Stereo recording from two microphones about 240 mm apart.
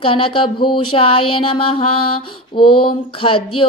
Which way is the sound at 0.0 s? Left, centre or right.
Left.